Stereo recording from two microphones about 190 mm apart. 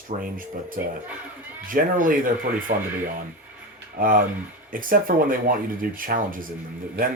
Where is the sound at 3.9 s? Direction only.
45° right (ahead or behind).